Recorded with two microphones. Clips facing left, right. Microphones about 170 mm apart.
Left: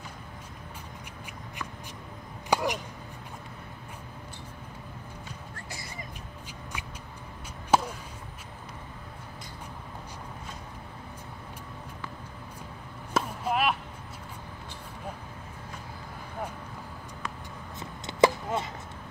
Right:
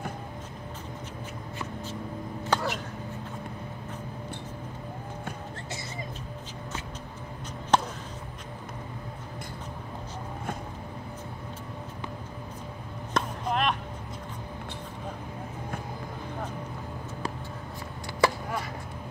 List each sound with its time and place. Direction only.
2.5 s chop: 15° left (ahead or behind)
7.7 s basketball bounce: 5° left (ahead or behind)
13.1 s chop: 5° left (ahead or behind)
18.0 s chop: 20° left (ahead or behind)